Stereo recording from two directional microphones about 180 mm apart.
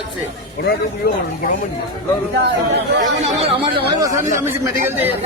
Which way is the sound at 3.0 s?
35° right (ahead or behind).